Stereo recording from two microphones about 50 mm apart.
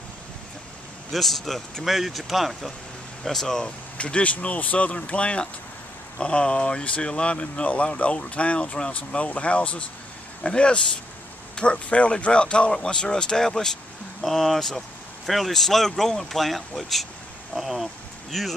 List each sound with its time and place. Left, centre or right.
1.1 s speech: centre
3.3 s speech: centre
3.6 s speech: left; by 18.5 s centre